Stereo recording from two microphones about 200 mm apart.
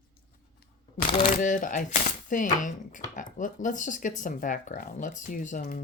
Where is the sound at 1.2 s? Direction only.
40° left (ahead or behind).